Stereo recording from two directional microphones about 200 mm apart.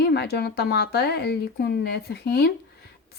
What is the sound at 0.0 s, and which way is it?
A woman's voice, 55° left (ahead or behind).